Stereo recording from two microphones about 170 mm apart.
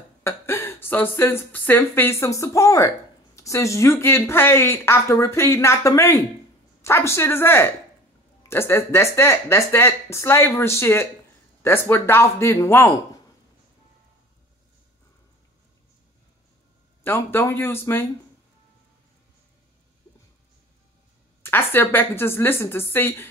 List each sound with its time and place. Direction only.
0.2 s speech: 15° left (ahead or behind)
17.0 s speech: 10° left (ahead or behind)
21.4 s speech: 15° left (ahead or behind)